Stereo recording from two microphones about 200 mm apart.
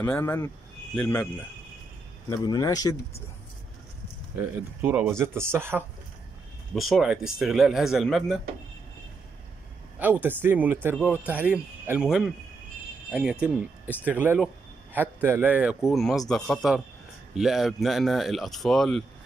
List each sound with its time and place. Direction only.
0.0 s speech: 10° left (ahead or behind)
4.4 s speech: 10° right (ahead or behind)
6.7 s speech: centre (ahead or behind)
9.9 s speech: 10° right (ahead or behind)
15.9 s speech: centre (ahead or behind)